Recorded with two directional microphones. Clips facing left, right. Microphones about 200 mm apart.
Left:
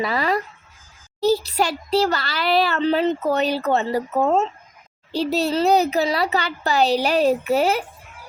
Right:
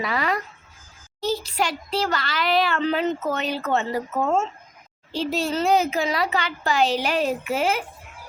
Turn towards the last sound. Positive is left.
turn(degrees=35)  # may be behind; listen again after turning